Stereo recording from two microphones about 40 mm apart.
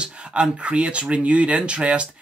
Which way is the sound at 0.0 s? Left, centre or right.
Right.